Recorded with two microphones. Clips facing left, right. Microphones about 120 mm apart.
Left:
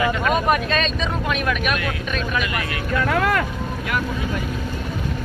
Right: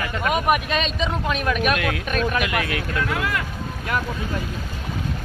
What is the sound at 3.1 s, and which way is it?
Speech, 55° left (ahead or behind).